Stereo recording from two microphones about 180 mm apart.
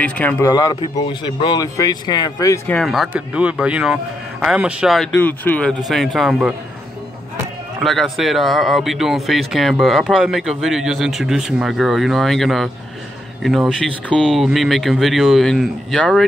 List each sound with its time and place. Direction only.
0.0 s speech: 10° left (ahead or behind)
0.5 s a man's voice: 20° left (ahead or behind)
2.7 s a man's voice: centre (ahead or behind)
7.8 s a man's voice: centre (ahead or behind)